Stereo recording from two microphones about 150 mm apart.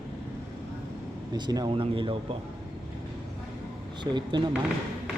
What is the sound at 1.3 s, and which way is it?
Speech, 30° right (ahead or behind).